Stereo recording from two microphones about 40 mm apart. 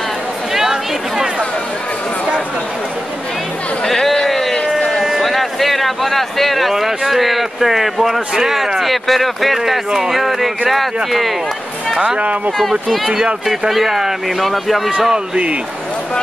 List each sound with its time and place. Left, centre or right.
0.6 s a sound: centre
3.8 s a sound: centre
5.2 s speech: centre
12.2 s speech: right
12.8 s speech: centre
14.9 s a man's voice: centre